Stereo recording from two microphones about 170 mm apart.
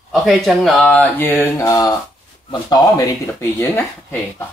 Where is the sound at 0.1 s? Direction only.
Centre (ahead or behind); by 2.0 s 20° left (ahead or behind).